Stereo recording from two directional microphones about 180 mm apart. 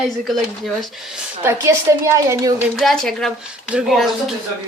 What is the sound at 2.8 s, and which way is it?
Speech, centre (ahead or behind).